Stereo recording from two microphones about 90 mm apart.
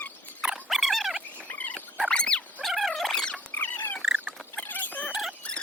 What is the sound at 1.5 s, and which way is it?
Dog, 20° left (ahead or behind).